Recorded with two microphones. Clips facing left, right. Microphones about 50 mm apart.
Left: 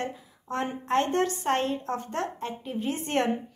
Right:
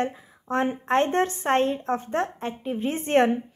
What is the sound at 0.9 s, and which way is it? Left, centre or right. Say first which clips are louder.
A woman's voice: right 1 dB; right.